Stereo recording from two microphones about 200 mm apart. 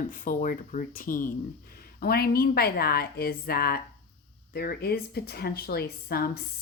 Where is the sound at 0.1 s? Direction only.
40° left (ahead or behind).